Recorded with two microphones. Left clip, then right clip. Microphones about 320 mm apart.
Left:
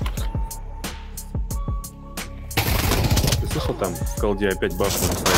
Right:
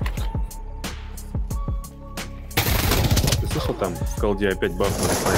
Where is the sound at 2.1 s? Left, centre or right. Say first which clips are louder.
Even; centre.